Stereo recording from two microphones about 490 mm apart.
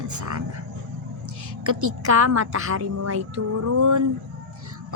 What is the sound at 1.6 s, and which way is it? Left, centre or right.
Speech, right.